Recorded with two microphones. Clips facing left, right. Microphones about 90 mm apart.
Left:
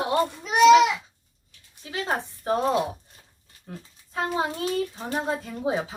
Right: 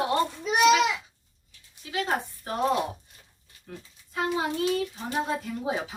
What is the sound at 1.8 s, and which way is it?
Speech, 30° left (ahead or behind).